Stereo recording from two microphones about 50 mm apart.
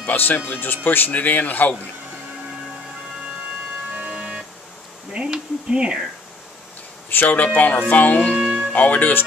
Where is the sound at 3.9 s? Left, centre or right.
Right.